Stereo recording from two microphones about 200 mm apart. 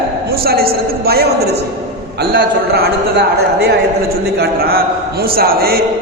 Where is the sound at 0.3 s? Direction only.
50° right (ahead or behind).